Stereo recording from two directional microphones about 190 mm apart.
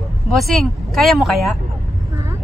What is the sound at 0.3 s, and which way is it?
Speech, centre (ahead or behind).